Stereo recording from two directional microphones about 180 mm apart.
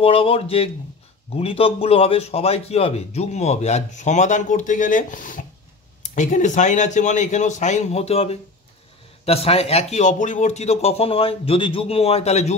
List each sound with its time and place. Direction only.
0.0 s a man's voice: 30° left (ahead or behind)